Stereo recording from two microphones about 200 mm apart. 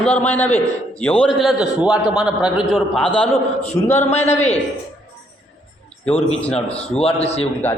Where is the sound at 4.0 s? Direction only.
30° left (ahead or behind).